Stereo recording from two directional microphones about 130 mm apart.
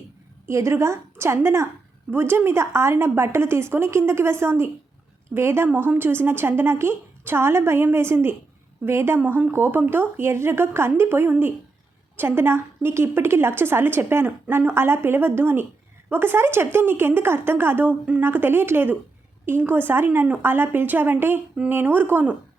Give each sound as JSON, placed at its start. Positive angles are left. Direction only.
{"t": 0.4, "sound": "a woman's voice", "side_deg": -20}